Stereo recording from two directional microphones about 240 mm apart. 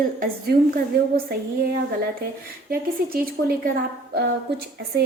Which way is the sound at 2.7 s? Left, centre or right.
Right.